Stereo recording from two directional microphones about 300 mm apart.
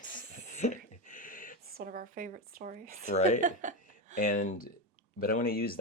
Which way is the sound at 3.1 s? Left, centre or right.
Left.